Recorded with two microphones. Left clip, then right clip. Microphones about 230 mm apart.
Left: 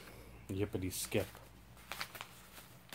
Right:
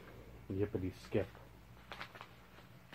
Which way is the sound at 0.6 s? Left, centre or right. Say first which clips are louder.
Even; left.